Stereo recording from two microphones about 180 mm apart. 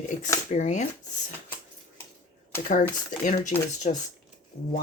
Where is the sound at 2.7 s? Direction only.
45° left (ahead or behind).